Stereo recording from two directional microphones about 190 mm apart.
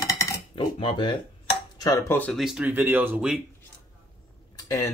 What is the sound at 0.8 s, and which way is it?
Speech, 25° left (ahead or behind).